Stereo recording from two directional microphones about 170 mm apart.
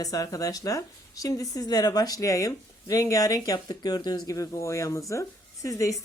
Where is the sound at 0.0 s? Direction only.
20° left (ahead or behind).